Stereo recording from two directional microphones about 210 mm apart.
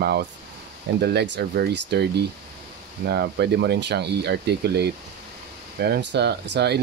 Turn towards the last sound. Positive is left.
turn(degrees=-50)  # may be behind; listen again after turning